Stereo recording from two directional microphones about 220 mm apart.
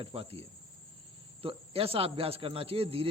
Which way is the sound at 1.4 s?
25° right (ahead or behind).